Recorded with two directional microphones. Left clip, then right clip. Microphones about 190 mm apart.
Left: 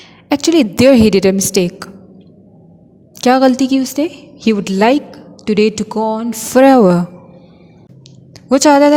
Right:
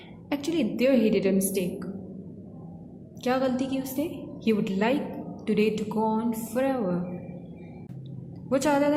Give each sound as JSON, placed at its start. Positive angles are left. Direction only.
{"t": 0.3, "sound": "a woman's voice", "side_deg": 55}
{"t": 3.2, "sound": "a woman's voice", "side_deg": 50}
{"t": 8.4, "sound": "a woman's voice", "side_deg": 50}